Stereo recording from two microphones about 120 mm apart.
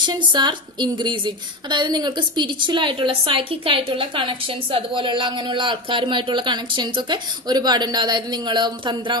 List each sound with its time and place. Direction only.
0.0 s a woman's voice: 35° right (ahead or behind)